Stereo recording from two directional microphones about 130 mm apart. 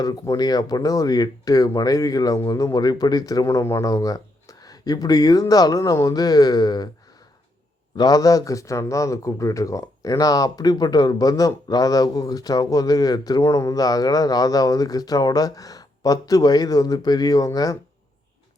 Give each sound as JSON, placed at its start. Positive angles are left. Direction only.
{"t": 0.0, "sound": "speech", "side_deg": 30}
{"t": 7.9, "sound": "speech", "side_deg": 30}